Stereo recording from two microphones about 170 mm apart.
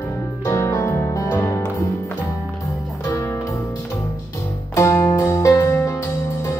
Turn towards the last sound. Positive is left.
turn(degrees=20)  # may be behind; listen again after turning